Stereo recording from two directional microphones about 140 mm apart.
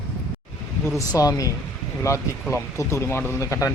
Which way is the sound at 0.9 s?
25° left (ahead or behind).